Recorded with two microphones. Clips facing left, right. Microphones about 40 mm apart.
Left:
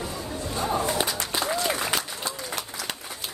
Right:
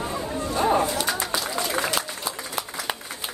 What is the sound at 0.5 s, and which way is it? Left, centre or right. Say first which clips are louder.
Speech: right 6 dB; right.